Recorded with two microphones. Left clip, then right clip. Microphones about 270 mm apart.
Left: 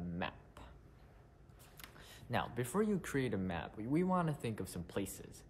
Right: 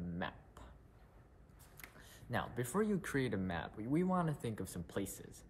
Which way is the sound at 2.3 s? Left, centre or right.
Centre.